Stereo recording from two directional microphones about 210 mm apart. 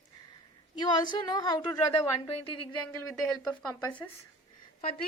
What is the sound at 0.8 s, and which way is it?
Speech, 20° left (ahead or behind).